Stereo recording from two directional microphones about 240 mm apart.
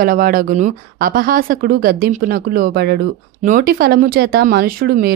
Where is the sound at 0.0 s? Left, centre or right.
Right.